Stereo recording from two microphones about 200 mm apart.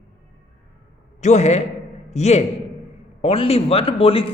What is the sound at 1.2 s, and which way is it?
A man's voice, 35° left (ahead or behind).